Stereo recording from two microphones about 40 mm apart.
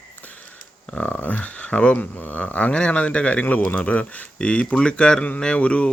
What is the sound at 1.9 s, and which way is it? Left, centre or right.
Speech, left.